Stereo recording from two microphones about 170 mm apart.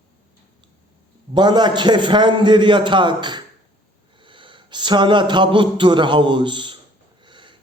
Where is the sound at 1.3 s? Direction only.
25° right (ahead or behind).